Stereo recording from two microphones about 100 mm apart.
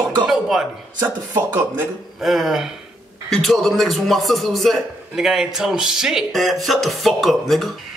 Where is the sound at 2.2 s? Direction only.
5° right (ahead or behind).